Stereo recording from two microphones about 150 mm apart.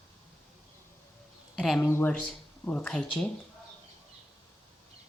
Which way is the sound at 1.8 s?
15° left (ahead or behind).